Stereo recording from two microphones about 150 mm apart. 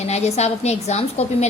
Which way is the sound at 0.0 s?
45° left (ahead or behind).